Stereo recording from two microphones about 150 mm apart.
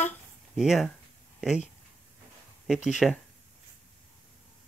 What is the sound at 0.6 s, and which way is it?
Speech, 5° right (ahead or behind).